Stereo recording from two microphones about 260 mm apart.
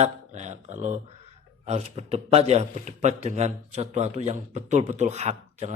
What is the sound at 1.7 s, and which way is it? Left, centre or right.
A man's voice, right.